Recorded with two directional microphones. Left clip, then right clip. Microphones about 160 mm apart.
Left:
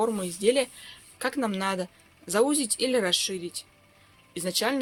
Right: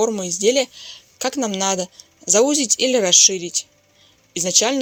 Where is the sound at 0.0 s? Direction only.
30° right (ahead or behind).